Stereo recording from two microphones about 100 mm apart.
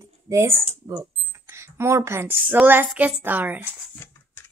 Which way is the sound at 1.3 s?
25° right (ahead or behind).